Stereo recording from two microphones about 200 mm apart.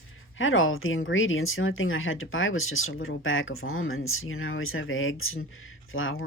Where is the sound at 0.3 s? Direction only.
80° left.